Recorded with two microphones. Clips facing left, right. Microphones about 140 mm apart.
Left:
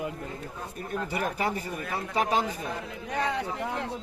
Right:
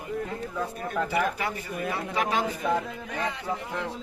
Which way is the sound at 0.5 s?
90° right.